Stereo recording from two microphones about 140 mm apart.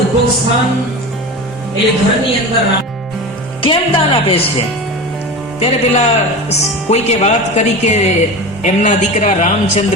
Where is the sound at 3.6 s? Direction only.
40° left (ahead or behind).